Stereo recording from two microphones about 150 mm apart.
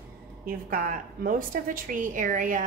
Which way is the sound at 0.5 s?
70° right (ahead or behind).